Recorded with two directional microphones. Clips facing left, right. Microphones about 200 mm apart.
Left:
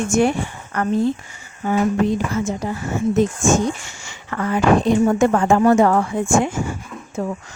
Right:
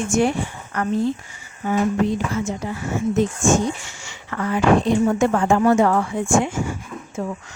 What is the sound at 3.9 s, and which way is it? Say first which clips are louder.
Speech: left 2 dB; 45° left (ahead or behind).